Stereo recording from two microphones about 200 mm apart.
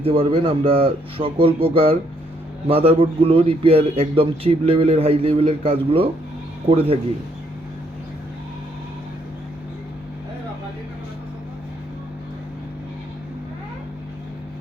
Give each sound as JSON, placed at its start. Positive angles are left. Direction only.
{"t": 0.0, "sound": "a man's voice", "side_deg": -30}